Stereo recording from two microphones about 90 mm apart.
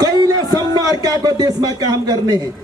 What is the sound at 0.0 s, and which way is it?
A man's voice, 45° right (ahead or behind).